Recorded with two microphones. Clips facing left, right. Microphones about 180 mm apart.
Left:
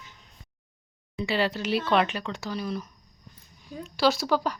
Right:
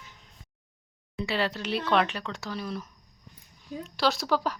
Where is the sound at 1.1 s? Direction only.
Centre (ahead or behind).